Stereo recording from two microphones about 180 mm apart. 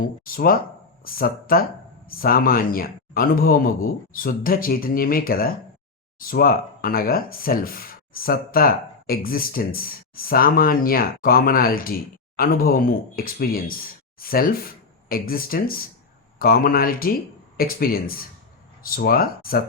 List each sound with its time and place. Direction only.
0.0 s speech: 55° left (ahead or behind)